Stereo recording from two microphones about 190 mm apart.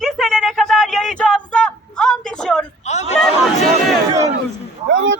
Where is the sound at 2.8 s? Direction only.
35° left (ahead or behind).